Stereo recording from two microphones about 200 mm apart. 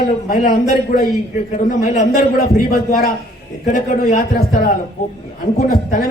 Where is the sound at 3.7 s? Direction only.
40° left (ahead or behind).